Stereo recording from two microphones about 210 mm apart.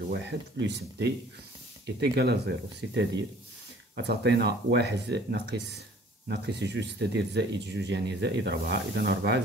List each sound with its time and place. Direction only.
0.1 s speech: 55° right (ahead or behind)